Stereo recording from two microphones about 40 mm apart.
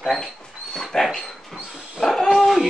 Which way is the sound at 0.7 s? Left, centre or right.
Centre.